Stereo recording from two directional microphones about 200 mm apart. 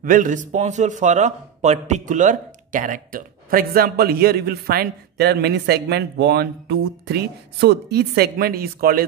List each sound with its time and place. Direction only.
0.0 s a man's voice: 40° right (ahead or behind)